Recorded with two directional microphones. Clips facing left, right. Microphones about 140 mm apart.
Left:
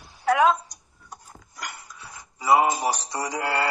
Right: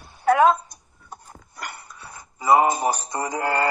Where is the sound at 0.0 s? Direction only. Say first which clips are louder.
Right 3 dB; 50° right (ahead or behind).